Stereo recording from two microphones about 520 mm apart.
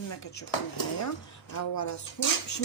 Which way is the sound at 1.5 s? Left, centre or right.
Left.